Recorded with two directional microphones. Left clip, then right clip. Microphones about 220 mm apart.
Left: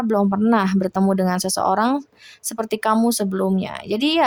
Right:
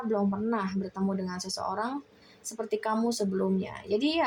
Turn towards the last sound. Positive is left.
turn(degrees=30)  # may be behind; listen again after turning